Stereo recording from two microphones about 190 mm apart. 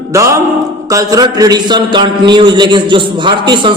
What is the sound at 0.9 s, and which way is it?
A man's voice, 20° right (ahead or behind).